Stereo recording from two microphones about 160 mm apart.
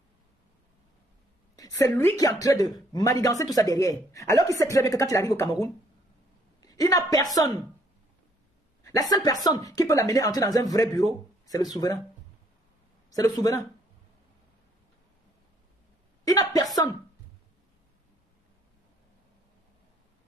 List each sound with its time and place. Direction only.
1.6 s speech: 20° left (ahead or behind)
9.1 s speech: 25° left (ahead or behind)
13.1 s speech: 20° left (ahead or behind)
16.3 s a sound: 20° left (ahead or behind)